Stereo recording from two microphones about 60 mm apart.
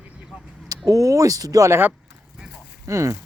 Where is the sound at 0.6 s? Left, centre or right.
Right.